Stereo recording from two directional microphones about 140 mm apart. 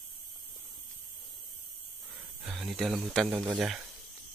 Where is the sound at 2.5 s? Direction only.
Centre (ahead or behind).